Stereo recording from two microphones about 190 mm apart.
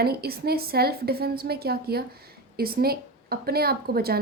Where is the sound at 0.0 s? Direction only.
55° right (ahead or behind).